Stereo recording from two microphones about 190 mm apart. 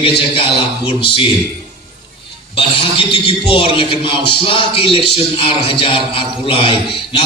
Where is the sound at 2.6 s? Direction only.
25° left (ahead or behind).